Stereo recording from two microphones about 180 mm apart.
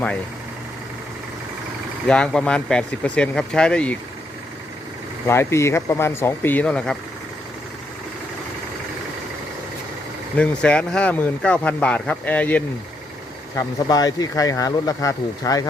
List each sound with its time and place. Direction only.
2.0 s speech: 5° left (ahead or behind)
5.3 s speech: 15° left (ahead or behind)
10.3 s speech: 5° left (ahead or behind)
13.6 s speech: 20° left (ahead or behind)